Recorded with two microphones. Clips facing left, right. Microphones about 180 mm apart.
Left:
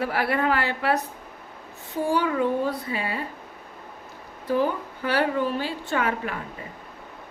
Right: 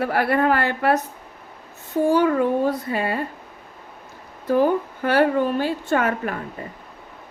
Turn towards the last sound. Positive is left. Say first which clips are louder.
# right 5 dB
turn(degrees=-50)  # may be behind; listen again after turning